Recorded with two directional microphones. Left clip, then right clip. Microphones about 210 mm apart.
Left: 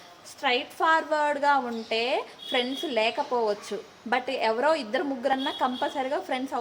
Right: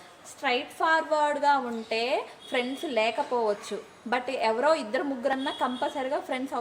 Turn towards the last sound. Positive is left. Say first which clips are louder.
# left 1 dB
turn(degrees=10)  # may be behind; listen again after turning